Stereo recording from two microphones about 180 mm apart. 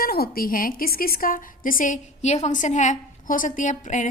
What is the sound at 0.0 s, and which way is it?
A woman's voice, 55° left (ahead or behind).